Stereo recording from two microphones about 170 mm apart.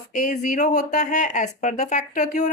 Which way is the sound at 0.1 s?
50° left (ahead or behind).